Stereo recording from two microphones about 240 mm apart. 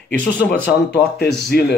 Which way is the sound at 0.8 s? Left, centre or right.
Left.